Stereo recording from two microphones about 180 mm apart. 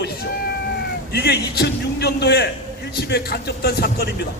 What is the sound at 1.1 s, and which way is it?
A man's voice, 65° left (ahead or behind).